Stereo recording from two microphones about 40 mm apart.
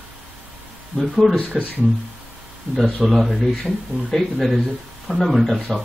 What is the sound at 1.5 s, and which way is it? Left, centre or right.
Speech, centre.